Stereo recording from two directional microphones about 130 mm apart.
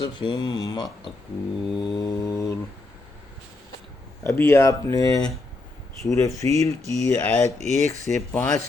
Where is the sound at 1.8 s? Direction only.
35° left (ahead or behind).